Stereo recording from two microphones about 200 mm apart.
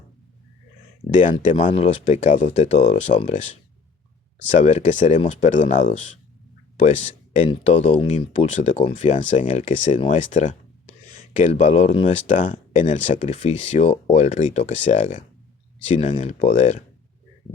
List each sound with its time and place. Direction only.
1.2 s speech: 40° left (ahead or behind)
4.5 s speech: 35° left (ahead or behind)